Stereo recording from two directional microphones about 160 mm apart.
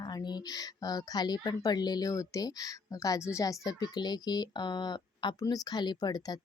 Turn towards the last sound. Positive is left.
turn(degrees=25)  # may be behind; listen again after turning